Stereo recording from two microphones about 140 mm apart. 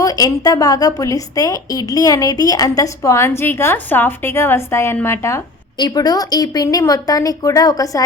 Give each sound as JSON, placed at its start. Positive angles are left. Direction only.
{"t": 0.0, "sound": "a woman's voice", "side_deg": 25}
{"t": 5.7, "sound": "a woman's voice", "side_deg": 30}